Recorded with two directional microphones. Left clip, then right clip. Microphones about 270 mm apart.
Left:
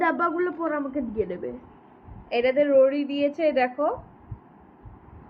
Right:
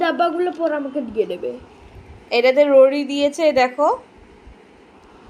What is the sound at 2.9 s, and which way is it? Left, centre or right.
Speech, right.